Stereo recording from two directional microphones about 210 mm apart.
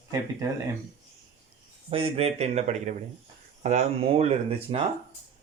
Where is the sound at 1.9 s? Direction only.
25° right (ahead or behind).